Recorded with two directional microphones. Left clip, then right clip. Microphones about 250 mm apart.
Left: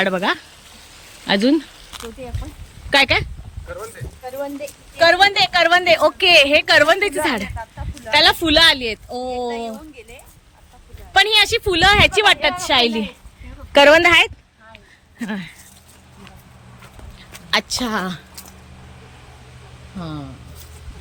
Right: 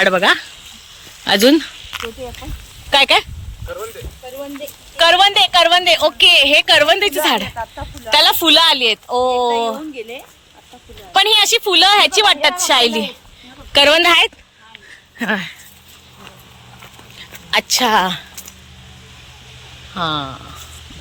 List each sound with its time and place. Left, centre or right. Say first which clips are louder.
0.0 s a woman's voice: right 6 dB; centre
2.9 s a woman's voice: right 3 dB; centre
5.0 s a woman's voice: right 2 dB; centre
11.1 s a woman's voice: right 2 dB; centre
17.5 s a woman's voice: right 6 dB; centre
20.0 s speech: right 13 dB; centre